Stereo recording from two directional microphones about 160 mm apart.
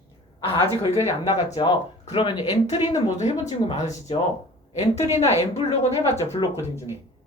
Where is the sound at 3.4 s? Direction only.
45° left (ahead or behind).